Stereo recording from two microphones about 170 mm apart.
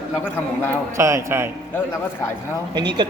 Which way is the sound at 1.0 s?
15° right (ahead or behind).